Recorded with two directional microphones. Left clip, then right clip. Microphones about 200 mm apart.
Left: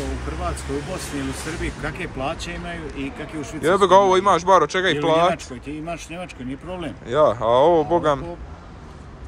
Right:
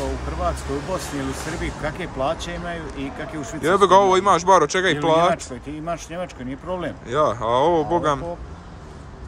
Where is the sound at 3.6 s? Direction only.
15° right (ahead or behind).